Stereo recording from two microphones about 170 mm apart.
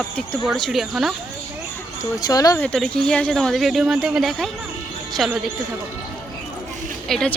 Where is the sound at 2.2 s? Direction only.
20° left (ahead or behind).